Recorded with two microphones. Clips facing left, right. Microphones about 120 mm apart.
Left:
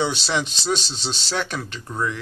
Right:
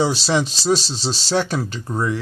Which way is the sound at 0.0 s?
35° right (ahead or behind).